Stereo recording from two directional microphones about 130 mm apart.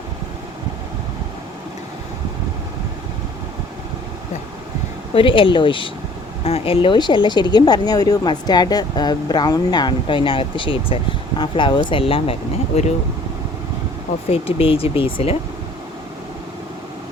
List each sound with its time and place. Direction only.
5.1 s speech: 40° left (ahead or behind)
14.3 s speech: 45° left (ahead or behind)